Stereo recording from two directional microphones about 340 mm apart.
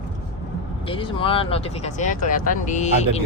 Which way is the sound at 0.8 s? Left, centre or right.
Centre.